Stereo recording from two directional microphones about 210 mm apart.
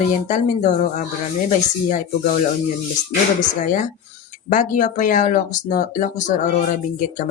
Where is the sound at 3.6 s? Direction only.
35° left (ahead or behind).